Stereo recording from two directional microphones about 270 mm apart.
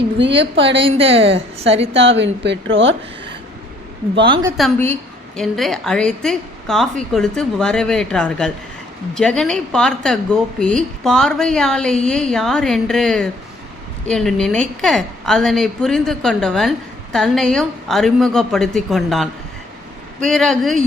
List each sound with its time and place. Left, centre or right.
0.5 s a woman's voice: right
0.9 s a woman's voice: right
1.1 s a woman's voice: right
1.7 s a woman's voice: right
2.0 s a woman's voice: right
4.2 s a woman's voice: centre
4.5 s a woman's voice: centre